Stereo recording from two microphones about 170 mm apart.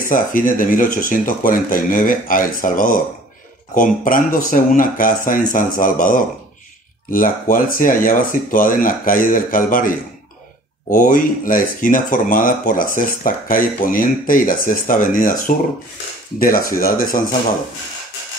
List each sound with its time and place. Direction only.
0.1 s speech: 55° left (ahead or behind)